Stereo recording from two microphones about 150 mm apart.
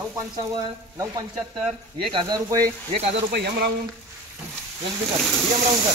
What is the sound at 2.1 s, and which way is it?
Speech, 25° right (ahead or behind).